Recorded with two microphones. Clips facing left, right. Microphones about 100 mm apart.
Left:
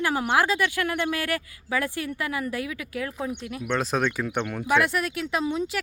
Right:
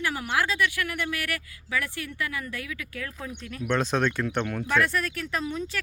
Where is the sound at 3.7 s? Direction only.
Centre (ahead or behind).